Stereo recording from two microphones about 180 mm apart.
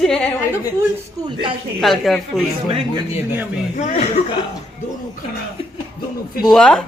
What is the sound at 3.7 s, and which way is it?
Speech, 40° left (ahead or behind).